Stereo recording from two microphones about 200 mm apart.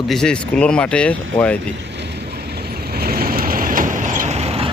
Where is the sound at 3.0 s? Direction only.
50° right (ahead or behind); by 4.7 s 30° right (ahead or behind).